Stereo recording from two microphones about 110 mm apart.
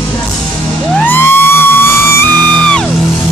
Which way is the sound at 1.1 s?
20° left (ahead or behind).